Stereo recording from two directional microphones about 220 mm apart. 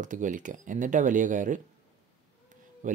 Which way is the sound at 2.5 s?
35° right (ahead or behind).